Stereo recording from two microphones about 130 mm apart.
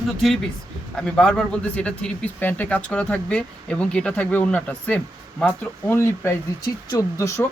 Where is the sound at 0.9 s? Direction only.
5° left (ahead or behind); by 7.4 s 20° left (ahead or behind).